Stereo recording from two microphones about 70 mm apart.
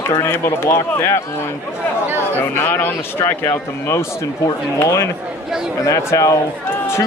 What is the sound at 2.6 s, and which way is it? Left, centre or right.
Speech, left.